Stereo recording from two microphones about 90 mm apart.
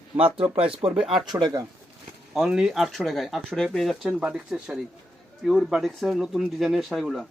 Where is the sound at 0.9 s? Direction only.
5° right (ahead or behind).